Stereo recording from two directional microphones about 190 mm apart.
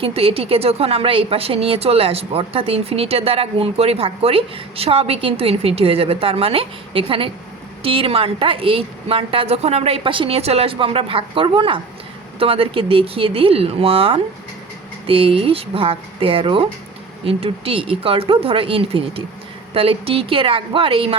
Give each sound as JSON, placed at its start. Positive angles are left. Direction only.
{"t": 0.0, "sound": "a woman's voice", "side_deg": -30}